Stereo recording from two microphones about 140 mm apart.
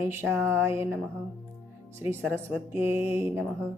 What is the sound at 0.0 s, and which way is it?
Speech, 20° right (ahead or behind).